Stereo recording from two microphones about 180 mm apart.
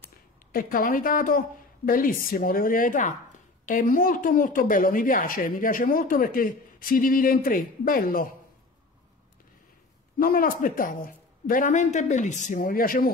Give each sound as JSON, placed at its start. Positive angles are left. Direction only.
{"t": 0.5, "sound": "speech", "side_deg": 50}
{"t": 10.1, "sound": "speech", "side_deg": 50}